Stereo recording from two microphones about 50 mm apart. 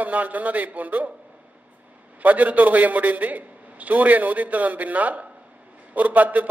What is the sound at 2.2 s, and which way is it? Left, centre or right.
A man's voice, right.